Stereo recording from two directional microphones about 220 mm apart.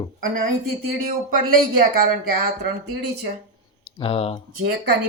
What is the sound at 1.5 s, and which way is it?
Speech, 40° right (ahead or behind).